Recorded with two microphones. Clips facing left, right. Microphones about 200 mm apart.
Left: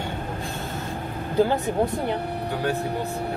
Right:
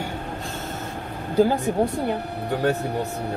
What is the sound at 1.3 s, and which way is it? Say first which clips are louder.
Speech: right 2 dB; 10° right (ahead or behind).